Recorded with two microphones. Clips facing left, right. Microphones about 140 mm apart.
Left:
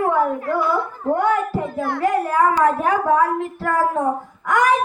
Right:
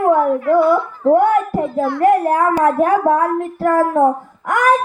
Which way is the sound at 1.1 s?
55° right (ahead or behind).